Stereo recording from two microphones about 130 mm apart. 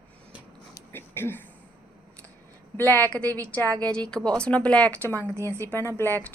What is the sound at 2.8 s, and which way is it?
Speech, 25° right (ahead or behind).